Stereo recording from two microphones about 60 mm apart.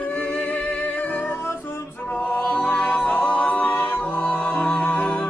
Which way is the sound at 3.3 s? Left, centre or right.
Left.